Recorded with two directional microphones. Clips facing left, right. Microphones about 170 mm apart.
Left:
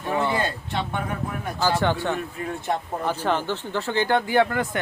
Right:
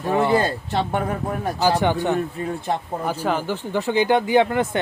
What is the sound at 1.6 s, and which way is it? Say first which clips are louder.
Speech: right 3 dB; 15° right (ahead or behind).